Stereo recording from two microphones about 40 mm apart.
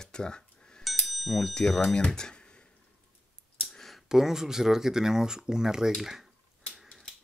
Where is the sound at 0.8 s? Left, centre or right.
Centre.